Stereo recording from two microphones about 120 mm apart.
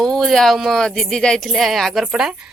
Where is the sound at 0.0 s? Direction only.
5° left (ahead or behind).